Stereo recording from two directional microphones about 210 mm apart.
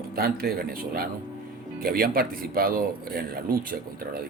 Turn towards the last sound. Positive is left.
turn(degrees=-45)  # may be behind; listen again after turning